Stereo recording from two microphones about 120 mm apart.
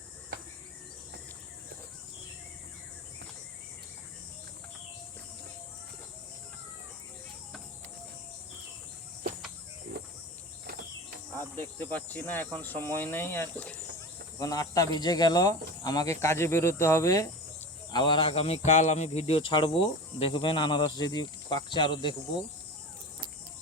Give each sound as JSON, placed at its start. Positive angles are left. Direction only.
{"t": 11.3, "sound": "speech", "side_deg": 20}
{"t": 14.3, "sound": "speech", "side_deg": 30}
{"t": 17.9, "sound": "speech", "side_deg": 40}